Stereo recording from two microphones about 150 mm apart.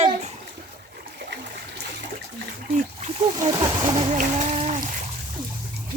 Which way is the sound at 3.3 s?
30° right (ahead or behind).